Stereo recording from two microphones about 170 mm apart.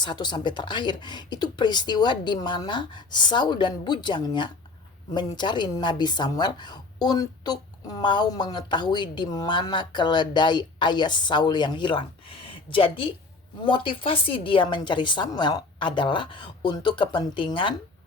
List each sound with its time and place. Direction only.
0.0 s a woman's voice: 25° left (ahead or behind)